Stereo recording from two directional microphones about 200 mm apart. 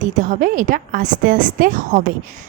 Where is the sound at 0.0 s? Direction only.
40° right (ahead or behind).